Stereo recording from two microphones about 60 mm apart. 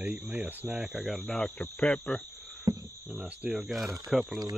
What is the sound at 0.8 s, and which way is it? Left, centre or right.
Speech, centre.